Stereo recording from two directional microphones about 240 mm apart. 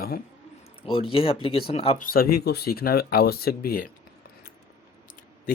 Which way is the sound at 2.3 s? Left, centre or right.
Left.